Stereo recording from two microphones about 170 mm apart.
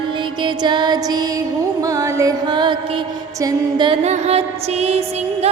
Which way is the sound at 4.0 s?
40° right (ahead or behind).